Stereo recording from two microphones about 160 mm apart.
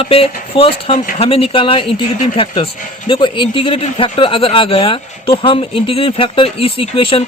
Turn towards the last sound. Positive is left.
turn(degrees=35)  # may be behind; listen again after turning